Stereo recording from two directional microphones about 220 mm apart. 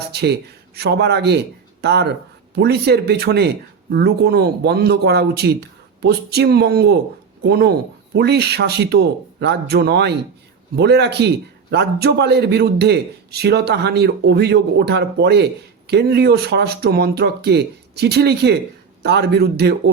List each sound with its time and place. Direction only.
0.1 s a man's voice: 50° right (ahead or behind)